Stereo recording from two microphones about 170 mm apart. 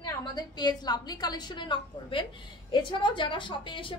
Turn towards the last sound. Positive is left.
turn(degrees=30)  # may be behind; listen again after turning